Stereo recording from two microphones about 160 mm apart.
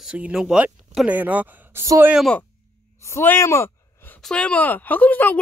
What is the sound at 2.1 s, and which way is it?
Speech, centre (ahead or behind).